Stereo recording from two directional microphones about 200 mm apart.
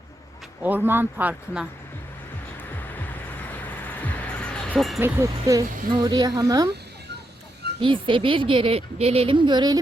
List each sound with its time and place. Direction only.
0.6 s speech: 10° right (ahead or behind)
2.9 s vehicle: 10° left (ahead or behind)
4.9 s a woman's voice: 10° right (ahead or behind)
7.8 s a woman's voice: 25° right (ahead or behind)